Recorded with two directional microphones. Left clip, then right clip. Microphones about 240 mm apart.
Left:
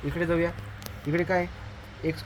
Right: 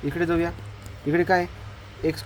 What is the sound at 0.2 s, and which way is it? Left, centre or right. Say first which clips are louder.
Speech: right 1 dB; right.